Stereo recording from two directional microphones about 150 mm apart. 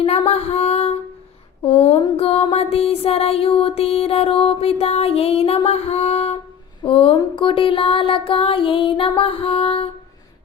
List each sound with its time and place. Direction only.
0.0 s female singing: 40° left (ahead or behind)
1.6 s music: 40° left (ahead or behind)